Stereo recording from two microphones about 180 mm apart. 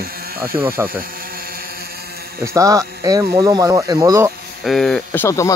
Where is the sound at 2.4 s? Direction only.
20° right (ahead or behind).